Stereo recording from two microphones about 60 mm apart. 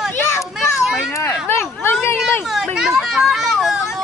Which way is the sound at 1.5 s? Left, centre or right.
Left.